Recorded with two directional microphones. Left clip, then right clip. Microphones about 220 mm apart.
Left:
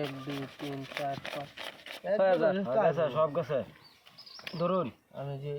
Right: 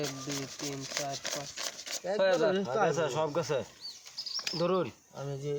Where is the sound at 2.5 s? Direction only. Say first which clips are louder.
Left 1 dB; 30° right (ahead or behind).